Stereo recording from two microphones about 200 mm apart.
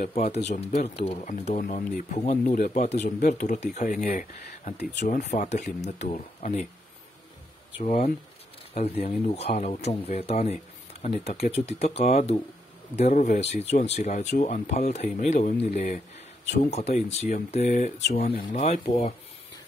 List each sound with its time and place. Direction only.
0.0 s speech: 35° left (ahead or behind); by 4.5 s 50° left (ahead or behind)
4.5 s speech: 35° left (ahead or behind)
7.8 s speech: 30° left (ahead or behind)
18.7 s speech: 40° left (ahead or behind)